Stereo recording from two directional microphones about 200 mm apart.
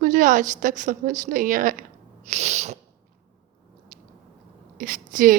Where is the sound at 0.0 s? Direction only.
40° right (ahead or behind).